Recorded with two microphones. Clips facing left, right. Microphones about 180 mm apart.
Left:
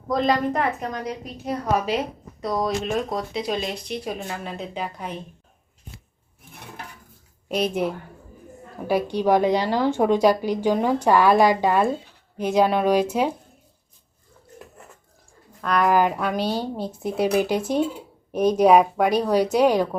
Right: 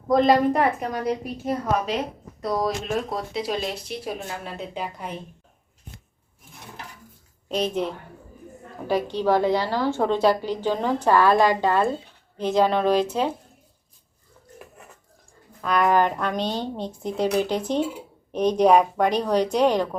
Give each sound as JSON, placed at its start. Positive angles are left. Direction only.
{"t": 0.1, "sound": "a woman's voice", "side_deg": -5}
{"t": 7.4, "sound": "a woman's voice", "side_deg": 10}
{"t": 15.6, "sound": "a woman's voice", "side_deg": 0}